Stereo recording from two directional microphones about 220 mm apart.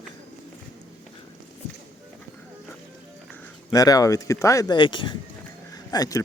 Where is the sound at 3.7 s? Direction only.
15° left (ahead or behind).